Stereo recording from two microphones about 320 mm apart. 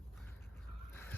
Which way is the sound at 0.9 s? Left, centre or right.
Centre.